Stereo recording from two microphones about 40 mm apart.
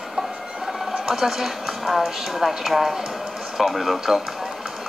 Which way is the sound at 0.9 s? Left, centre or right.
Centre.